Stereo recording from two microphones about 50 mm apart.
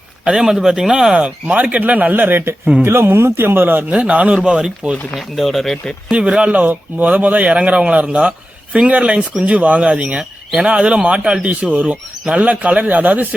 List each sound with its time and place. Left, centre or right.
0.3 s a man's voice: centre; by 3.9 s right
3.9 s speech: right
5.1 s speech: centre
6.1 s speech: right